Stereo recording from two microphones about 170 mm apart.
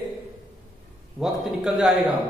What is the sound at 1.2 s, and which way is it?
Speech, 5° right (ahead or behind).